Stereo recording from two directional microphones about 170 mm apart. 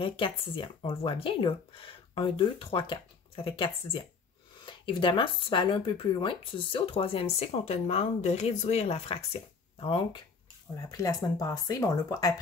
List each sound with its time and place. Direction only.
0.0 s speech: 30° left (ahead or behind)
10.8 s speech: 20° left (ahead or behind)